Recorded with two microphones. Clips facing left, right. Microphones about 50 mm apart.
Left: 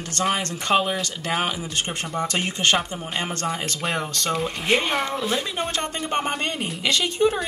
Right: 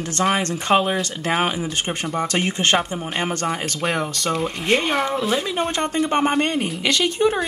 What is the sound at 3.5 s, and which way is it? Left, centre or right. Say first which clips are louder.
Speech: right 3 dB; centre.